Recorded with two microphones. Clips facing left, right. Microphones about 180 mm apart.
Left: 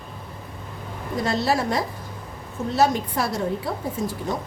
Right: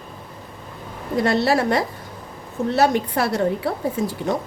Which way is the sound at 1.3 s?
65° right (ahead or behind).